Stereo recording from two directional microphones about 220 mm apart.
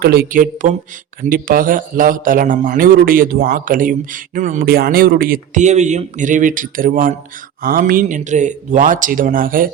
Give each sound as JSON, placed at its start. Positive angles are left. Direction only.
{"t": 0.0, "sound": "speech", "side_deg": -45}